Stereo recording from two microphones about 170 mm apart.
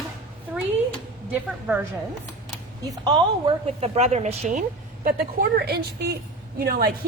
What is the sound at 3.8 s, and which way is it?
A woman's voice, 40° right (ahead or behind).